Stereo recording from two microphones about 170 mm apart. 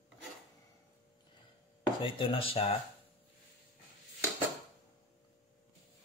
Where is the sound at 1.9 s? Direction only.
30° left (ahead or behind).